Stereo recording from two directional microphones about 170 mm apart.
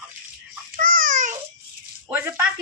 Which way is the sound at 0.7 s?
55° right (ahead or behind).